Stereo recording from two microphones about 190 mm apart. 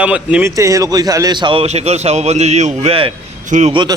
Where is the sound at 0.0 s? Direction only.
5° right (ahead or behind); by 3.8 s 35° right (ahead or behind).